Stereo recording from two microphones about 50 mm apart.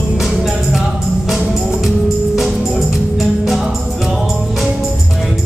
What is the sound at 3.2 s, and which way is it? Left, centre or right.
Music, centre.